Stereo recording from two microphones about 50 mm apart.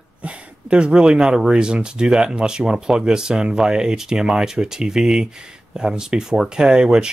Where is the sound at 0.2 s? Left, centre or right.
Right.